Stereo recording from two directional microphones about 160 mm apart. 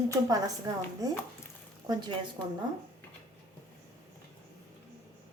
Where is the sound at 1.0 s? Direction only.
20° right (ahead or behind).